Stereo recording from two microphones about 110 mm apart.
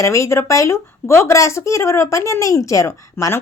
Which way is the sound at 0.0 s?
25° left (ahead or behind).